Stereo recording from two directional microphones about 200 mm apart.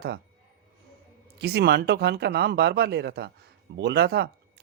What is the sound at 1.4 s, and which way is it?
Speech, 55° right (ahead or behind).